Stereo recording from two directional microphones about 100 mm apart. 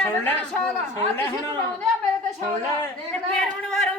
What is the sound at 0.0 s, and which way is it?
Speech, 20° left (ahead or behind).